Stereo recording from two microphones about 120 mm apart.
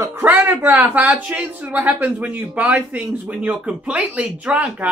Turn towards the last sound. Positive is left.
turn(degrees=-10)  # may be behind; listen again after turning